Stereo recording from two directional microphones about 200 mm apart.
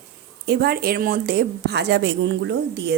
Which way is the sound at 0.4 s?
50° right (ahead or behind).